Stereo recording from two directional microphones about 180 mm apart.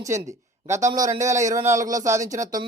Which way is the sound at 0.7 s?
15° right (ahead or behind).